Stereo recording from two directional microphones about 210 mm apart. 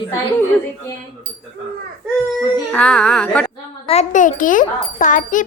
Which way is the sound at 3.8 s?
30° left (ahead or behind).